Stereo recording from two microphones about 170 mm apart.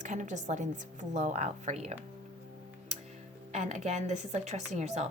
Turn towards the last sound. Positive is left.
turn(degrees=-40)  # may be behind; listen again after turning